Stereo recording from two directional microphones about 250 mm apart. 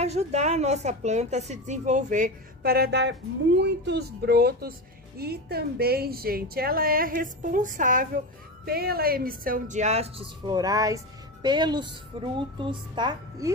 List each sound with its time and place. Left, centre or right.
0.0 s a woman's voice: right